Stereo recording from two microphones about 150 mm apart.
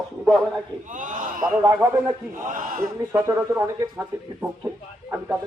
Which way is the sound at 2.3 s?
60° right (ahead or behind).